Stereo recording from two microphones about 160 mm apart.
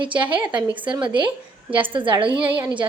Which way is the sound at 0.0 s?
30° right (ahead or behind).